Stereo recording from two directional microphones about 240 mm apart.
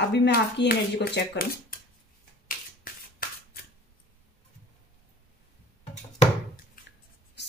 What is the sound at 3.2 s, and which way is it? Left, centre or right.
Scissors, left.